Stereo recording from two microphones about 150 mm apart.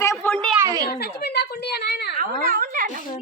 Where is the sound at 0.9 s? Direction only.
90° left.